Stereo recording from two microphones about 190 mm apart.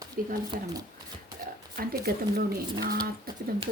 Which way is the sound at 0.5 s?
25° right (ahead or behind).